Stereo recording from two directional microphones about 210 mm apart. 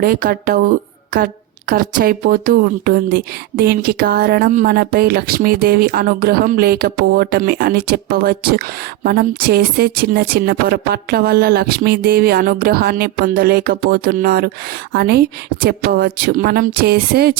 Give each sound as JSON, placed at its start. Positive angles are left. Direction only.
{"t": 0.0, "sound": "speech", "side_deg": -45}